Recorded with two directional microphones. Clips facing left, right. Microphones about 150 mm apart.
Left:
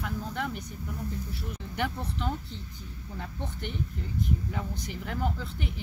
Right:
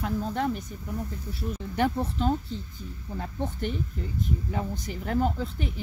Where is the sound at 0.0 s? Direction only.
35° right (ahead or behind).